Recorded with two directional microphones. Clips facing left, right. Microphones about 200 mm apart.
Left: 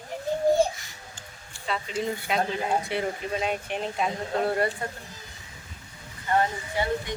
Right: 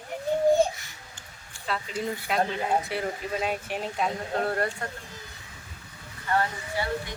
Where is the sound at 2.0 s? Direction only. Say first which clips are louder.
Even; centre (ahead or behind).